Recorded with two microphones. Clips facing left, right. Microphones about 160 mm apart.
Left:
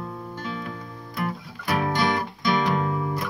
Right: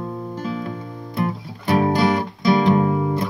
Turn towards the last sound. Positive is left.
turn(degrees=-25)  # may be behind; listen again after turning